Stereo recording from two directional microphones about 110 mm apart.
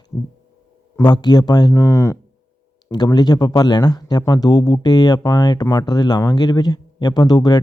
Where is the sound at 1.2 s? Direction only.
40° left (ahead or behind).